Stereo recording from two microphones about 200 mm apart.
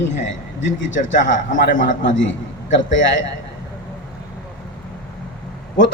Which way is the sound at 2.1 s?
70° left (ahead or behind).